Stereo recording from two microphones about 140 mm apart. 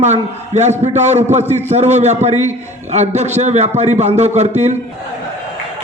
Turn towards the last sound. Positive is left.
turn(degrees=-55)  # may be behind; listen again after turning